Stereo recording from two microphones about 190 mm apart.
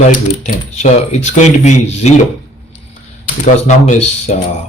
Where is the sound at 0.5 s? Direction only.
35° left (ahead or behind).